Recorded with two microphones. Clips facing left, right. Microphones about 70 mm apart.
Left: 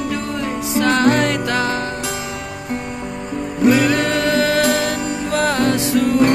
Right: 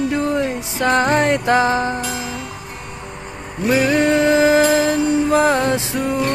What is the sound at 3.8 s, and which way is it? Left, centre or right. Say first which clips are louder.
Music: right 2 dB; right.